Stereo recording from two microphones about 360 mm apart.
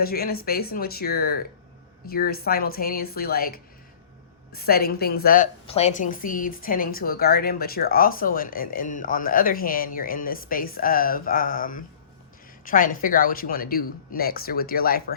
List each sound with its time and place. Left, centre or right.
0.0 s a woman's voice: left